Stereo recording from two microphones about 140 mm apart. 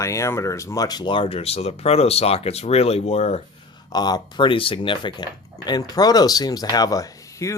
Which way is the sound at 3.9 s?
30° left (ahead or behind).